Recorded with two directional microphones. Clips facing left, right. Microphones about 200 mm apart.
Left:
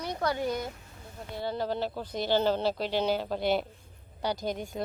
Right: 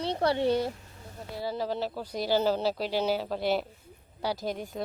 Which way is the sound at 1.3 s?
5° right (ahead or behind).